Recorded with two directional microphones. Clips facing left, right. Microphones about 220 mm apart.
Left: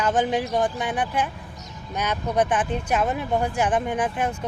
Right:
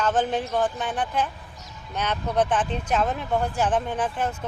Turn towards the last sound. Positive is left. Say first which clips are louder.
# left 2 dB
turn(degrees=10)  # may be behind; listen again after turning